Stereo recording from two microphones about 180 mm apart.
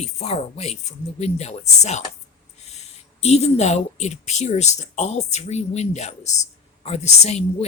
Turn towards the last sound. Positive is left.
turn(degrees=40)  # may be behind; listen again after turning